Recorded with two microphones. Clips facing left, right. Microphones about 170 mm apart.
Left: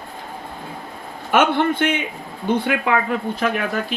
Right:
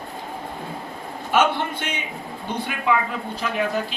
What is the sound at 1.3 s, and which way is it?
Speech, 55° left (ahead or behind).